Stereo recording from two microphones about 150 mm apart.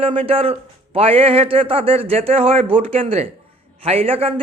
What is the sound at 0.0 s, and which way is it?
Speech, 40° right (ahead or behind).